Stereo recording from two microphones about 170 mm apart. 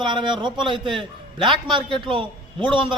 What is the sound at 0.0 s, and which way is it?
A man's voice, 25° right (ahead or behind).